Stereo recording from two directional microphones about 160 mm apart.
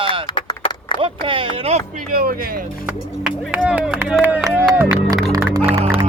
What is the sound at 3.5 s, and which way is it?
Speech, 10° right (ahead or behind).